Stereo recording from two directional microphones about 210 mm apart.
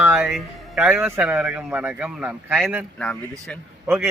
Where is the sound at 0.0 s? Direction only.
10° right (ahead or behind).